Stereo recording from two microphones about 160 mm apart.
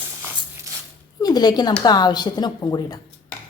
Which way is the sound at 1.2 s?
25° left (ahead or behind).